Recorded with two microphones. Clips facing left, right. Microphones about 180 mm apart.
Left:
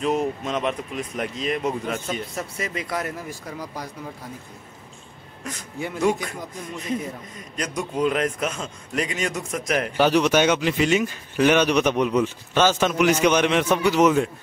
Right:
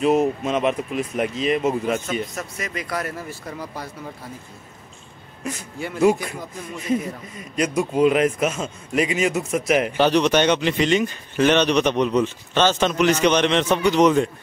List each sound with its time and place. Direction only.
0.0 s a man's voice: 5° right (ahead or behind)
2.5 s speech: 25° left (ahead or behind)
5.4 s a man's voice: 10° right (ahead or behind)
7.3 s a man's voice: 10° right (ahead or behind)
9.9 s speech: 5° left (ahead or behind)